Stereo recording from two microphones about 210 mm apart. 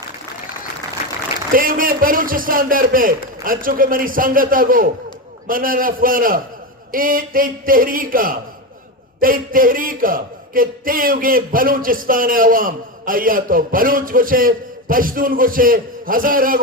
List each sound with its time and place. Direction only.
1.5 s speech: 40° right (ahead or behind)